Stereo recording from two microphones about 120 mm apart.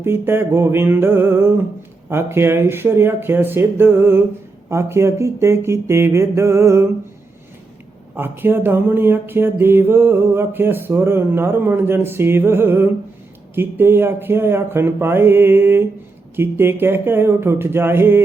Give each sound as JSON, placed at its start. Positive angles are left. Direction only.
{"t": 0.0, "sound": "speech", "side_deg": -20}
{"t": 8.1, "sound": "mantra", "side_deg": -15}
{"t": 16.3, "sound": "speech", "side_deg": -20}